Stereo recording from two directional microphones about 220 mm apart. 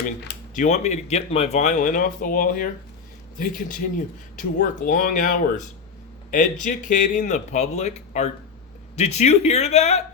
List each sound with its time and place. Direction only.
0.5 s speech: 35° left (ahead or behind)
6.7 s speech: 35° left (ahead or behind)